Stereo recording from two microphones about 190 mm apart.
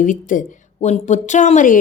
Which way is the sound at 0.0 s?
45° left (ahead or behind).